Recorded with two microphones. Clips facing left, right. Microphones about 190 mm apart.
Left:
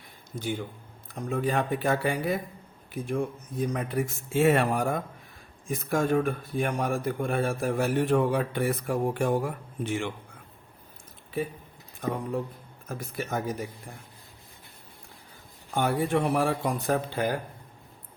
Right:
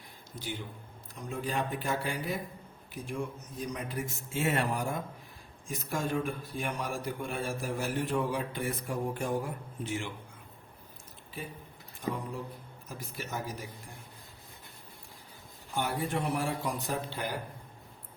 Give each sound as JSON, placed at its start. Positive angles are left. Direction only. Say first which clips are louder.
{"t": 0.3, "sound": "a man's voice", "louder": "left 8 dB", "side_deg": 50}
{"t": 12.0, "sound": "a man's voice", "louder": "left 6 dB", "side_deg": 55}
{"t": 15.7, "sound": "a man's voice", "louder": "left 7 dB", "side_deg": 55}